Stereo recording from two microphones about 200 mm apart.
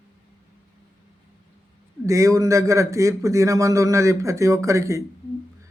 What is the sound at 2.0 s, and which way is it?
Speech, 15° right (ahead or behind).